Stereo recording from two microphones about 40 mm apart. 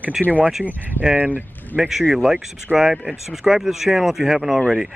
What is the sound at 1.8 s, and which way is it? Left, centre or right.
Speech, centre.